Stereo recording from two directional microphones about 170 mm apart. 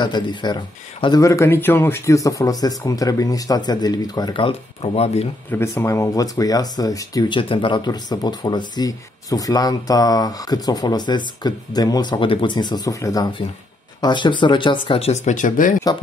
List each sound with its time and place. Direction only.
0.0 s speech: 25° left (ahead or behind)
5.5 s speech: 15° left (ahead or behind)
14.9 s speech: 40° left (ahead or behind)